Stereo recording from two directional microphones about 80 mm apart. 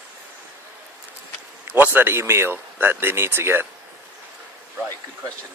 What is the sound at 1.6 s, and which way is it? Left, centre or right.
A man's voice, right.